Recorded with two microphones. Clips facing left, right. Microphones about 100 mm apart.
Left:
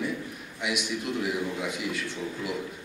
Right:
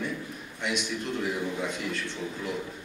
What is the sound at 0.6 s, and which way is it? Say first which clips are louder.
A man's voice: left 1 dB; 10° left (ahead or behind).